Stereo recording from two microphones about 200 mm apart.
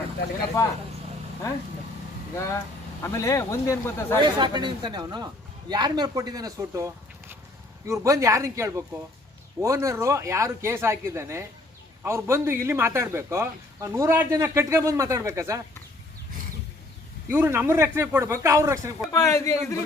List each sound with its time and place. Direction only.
0.6 s speech: 15° left (ahead or behind)
3.0 s speech: 15° left (ahead or behind)
4.2 s a woman's voice: 20° right (ahead or behind)
17.2 s a man's voice: 10° right (ahead or behind)
19.1 s speech: 15° left (ahead or behind)